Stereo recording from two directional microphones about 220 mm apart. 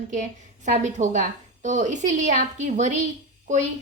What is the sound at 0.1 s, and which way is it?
A woman's voice, 35° right (ahead or behind).